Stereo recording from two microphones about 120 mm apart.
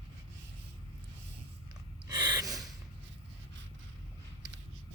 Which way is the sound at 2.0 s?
35° right (ahead or behind).